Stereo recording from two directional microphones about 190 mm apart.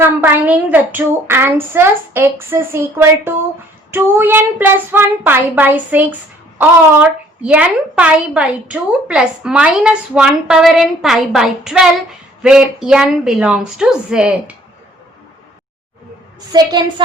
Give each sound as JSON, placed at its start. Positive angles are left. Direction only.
{"t": 0.0, "sound": "speech", "side_deg": -10}
{"t": 7.4, "sound": "a woman's voice", "side_deg": -5}
{"t": 16.5, "sound": "a woman's voice", "side_deg": -20}